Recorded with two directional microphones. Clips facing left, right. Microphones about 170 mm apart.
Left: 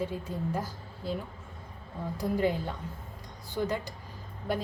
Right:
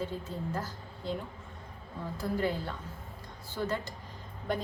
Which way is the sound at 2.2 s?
15° left (ahead or behind).